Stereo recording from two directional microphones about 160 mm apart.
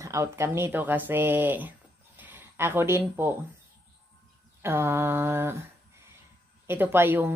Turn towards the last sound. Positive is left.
turn(degrees=-10)  # may be behind; listen again after turning